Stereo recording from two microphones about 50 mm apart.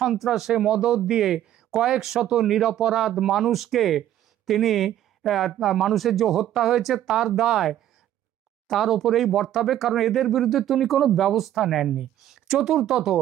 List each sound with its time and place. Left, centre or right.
0.0 s speech: centre
0.5 s speech: centre